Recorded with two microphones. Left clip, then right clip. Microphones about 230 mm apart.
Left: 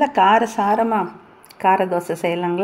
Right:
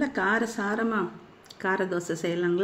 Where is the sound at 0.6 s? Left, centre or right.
Left.